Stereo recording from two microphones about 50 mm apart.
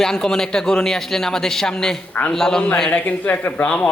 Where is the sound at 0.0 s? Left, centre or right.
Centre.